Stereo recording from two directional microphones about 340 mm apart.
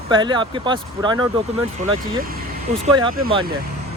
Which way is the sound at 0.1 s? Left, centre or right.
Centre.